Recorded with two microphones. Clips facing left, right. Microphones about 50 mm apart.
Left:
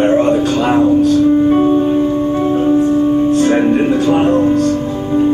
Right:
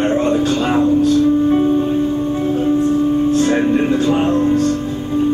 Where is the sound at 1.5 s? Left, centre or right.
Left.